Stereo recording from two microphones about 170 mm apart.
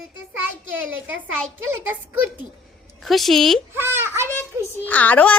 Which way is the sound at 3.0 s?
Centre (ahead or behind).